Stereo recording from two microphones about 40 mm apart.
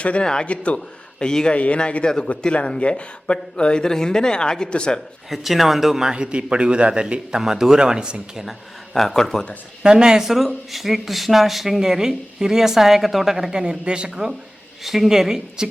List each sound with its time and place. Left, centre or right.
0.2 s speech: left
0.4 s speech: left
1.2 s speech: centre
1.5 s speech: left
5.3 s speech: centre
6.1 s a man's voice: right
7.3 s speech: centre
7.8 s a man's voice: right
8.4 s speech: centre
9.8 s speech: right; by 13.3 s centre
13.3 s a man's voice: centre
14.8 s speech: centre